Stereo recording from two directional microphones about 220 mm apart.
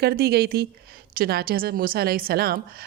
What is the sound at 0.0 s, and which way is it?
A woman's voice, 45° right (ahead or behind).